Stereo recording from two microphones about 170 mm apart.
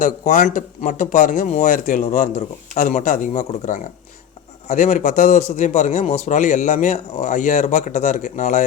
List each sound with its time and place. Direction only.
0.0 s a man's voice: 50° left (ahead or behind)